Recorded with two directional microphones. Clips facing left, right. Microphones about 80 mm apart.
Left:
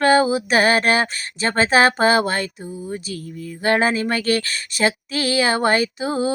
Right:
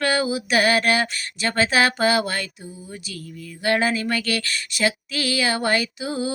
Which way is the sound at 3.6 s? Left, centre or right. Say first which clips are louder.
Left 3 dB; left.